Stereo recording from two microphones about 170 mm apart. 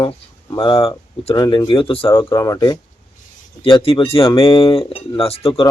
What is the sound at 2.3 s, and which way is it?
Speech, 20° left (ahead or behind).